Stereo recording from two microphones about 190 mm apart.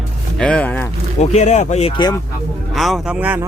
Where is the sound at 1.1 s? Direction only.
35° left (ahead or behind).